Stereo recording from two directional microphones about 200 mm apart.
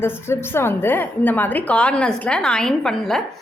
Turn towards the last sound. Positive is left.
turn(degrees=5)  # may be behind; listen again after turning